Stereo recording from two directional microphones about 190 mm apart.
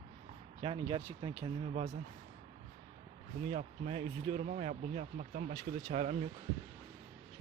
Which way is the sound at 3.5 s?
40° right (ahead or behind).